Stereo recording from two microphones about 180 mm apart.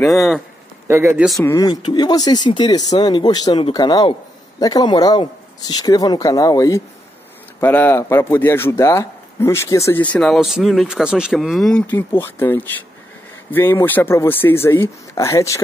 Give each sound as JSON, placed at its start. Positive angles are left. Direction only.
{"t": 0.1, "sound": "speech", "side_deg": 0}
{"t": 0.8, "sound": "speech", "side_deg": -15}
{"t": 1.4, "sound": "speech", "side_deg": 20}
{"t": 11.8, "sound": "speech", "side_deg": 10}